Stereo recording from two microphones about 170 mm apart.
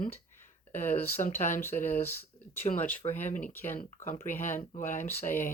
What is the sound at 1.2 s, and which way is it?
Speech, 45° left (ahead or behind).